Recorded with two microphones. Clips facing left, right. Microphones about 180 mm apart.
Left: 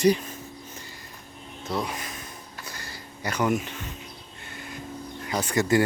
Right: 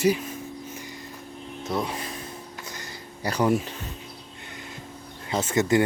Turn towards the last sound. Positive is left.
turn(degrees=-20)  # may be behind; listen again after turning